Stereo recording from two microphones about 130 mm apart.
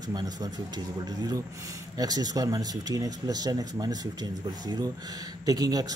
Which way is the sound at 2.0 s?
30° right (ahead or behind).